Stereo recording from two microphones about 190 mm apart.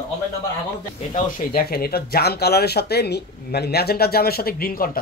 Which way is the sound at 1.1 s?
50° left (ahead or behind).